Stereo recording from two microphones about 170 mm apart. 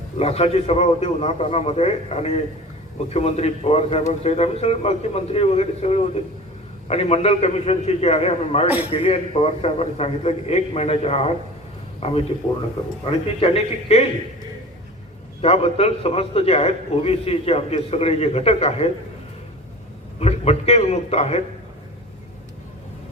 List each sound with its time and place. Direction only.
0.2 s a man's voice: 40° left (ahead or behind)
15.4 s a man's voice: 35° left (ahead or behind)
20.1 s a man's voice: 40° left (ahead or behind)